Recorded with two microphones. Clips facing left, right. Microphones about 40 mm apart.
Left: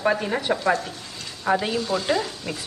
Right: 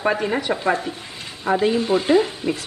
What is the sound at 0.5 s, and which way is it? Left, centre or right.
Speech, right.